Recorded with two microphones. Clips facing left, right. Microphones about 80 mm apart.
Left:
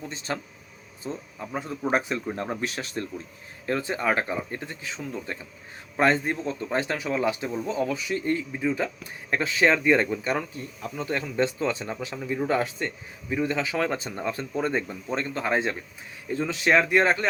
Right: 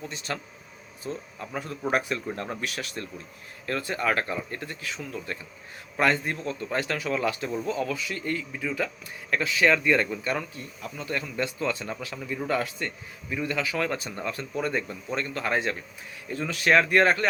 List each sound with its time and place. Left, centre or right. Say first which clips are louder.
0.3 s speech: left 4 dB; left